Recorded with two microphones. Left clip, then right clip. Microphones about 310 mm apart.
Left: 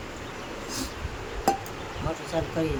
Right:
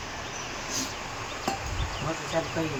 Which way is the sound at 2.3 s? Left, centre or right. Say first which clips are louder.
Even; left.